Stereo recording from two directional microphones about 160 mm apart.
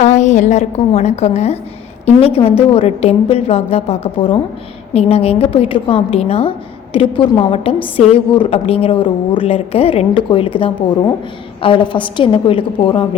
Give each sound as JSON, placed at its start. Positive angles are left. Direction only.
{"t": 0.0, "sound": "a woman's voice", "side_deg": 45}